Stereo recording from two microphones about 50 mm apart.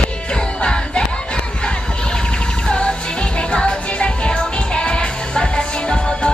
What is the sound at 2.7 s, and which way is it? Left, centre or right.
Music, centre.